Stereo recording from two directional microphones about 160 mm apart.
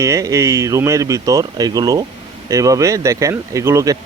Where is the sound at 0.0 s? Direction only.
20° right (ahead or behind).